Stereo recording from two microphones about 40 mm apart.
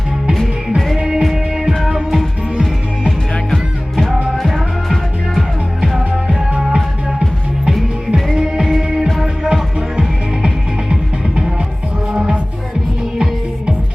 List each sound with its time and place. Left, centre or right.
0.9 s music: centre
3.5 s music: centre
9.2 s music: centre
12.1 s music: right